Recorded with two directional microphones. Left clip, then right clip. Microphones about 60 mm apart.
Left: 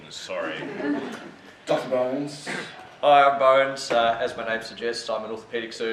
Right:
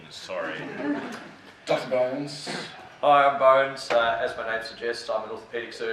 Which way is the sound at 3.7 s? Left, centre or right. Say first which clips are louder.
Left 1 dB; centre.